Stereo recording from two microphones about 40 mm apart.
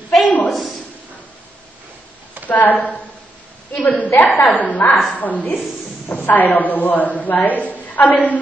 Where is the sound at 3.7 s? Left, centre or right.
Left.